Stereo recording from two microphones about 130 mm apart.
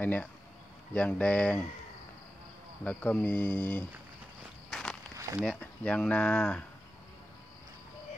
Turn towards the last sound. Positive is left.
turn(degrees=15)  # may be behind; listen again after turning